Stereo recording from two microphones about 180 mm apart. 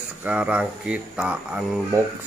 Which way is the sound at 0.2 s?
10° right (ahead or behind).